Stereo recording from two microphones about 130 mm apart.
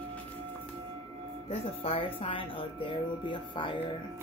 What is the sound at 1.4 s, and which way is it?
Speech, 50° left (ahead or behind).